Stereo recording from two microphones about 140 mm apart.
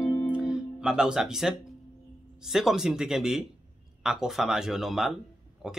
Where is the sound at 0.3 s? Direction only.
5° right (ahead or behind).